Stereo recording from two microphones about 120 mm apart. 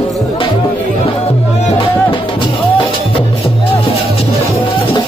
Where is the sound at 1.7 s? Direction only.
45° left (ahead or behind).